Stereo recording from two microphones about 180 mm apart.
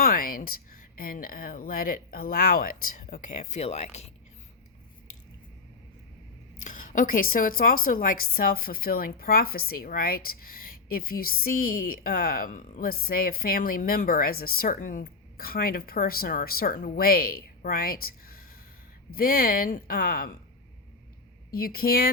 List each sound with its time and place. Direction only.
0.0 s a woman's voice: 55° left (ahead or behind); by 4.1 s 35° left (ahead or behind)
6.7 s a woman's voice: 50° left (ahead or behind)
21.5 s a woman's voice: 55° left (ahead or behind)